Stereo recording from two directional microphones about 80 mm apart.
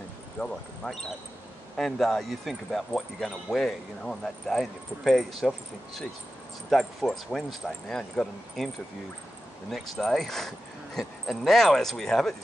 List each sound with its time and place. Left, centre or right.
0.4 s speech: left
0.8 s speech: centre
6.7 s speech: centre
9.7 s speech: centre